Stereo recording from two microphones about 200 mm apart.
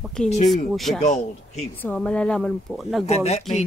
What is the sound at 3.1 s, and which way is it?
Speech, 30° left (ahead or behind).